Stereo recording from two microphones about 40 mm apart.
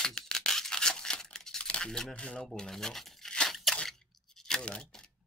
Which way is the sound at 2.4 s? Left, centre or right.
Centre.